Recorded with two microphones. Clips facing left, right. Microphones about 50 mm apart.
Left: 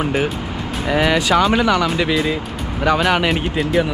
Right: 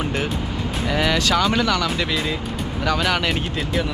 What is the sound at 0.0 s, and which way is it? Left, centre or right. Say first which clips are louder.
Speech: left 4 dB; centre.